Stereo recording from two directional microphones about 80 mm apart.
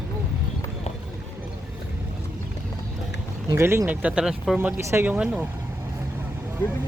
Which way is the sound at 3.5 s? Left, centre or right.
Right.